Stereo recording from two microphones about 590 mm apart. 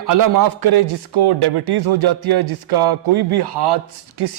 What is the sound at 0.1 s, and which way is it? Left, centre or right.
A man's voice, right.